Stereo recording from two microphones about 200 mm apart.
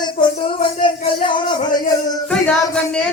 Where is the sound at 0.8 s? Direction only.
25° left (ahead or behind).